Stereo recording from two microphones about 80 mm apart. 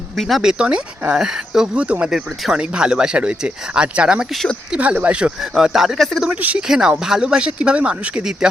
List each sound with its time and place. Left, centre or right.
0.2 s speech: centre
0.6 s speech: centre
4.3 s speech: centre
4.7 s speech: centre
6.2 s speech: centre